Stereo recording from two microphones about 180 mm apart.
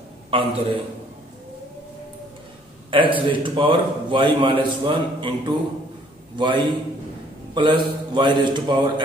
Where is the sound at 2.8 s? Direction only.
30° right (ahead or behind).